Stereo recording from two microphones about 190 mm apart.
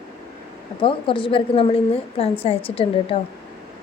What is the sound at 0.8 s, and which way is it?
Speech, 25° left (ahead or behind).